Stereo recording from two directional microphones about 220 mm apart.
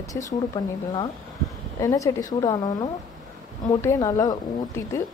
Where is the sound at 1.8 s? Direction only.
15° left (ahead or behind).